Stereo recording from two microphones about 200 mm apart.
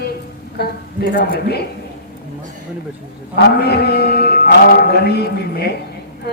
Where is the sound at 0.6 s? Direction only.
55° left (ahead or behind).